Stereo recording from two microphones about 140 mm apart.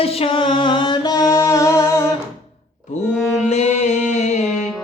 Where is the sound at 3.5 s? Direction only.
55° left (ahead or behind).